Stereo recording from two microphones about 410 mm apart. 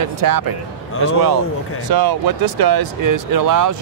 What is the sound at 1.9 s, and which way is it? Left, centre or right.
Speech, right.